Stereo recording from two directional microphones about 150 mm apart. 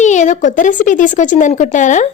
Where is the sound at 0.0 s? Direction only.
55° left (ahead or behind).